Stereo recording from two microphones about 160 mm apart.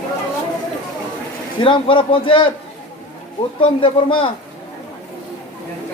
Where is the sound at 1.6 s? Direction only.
30° left (ahead or behind).